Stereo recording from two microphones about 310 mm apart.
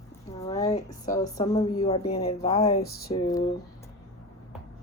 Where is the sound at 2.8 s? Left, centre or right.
Left.